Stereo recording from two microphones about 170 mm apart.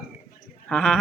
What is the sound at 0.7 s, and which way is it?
Speech, 5° left (ahead or behind).